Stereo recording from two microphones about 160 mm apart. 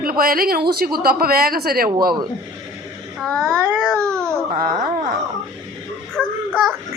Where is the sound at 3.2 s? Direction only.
5° left (ahead or behind).